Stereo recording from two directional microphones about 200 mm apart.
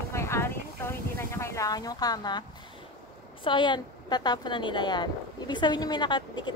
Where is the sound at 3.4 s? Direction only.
25° left (ahead or behind).